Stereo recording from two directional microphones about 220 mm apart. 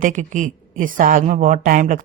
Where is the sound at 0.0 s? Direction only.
35° right (ahead or behind).